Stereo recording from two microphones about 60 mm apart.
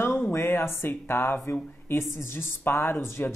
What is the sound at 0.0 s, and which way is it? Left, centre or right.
A woman's voice, left.